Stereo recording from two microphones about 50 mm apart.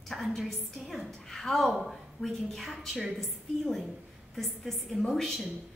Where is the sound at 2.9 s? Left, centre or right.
Centre.